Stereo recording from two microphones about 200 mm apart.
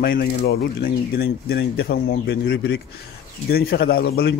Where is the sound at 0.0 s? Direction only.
50° left (ahead or behind).